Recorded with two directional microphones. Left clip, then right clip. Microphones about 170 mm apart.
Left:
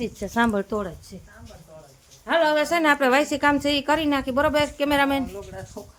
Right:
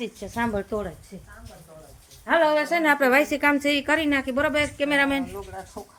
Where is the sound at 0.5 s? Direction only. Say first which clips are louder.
Left 2 dB; 35° left (ahead or behind).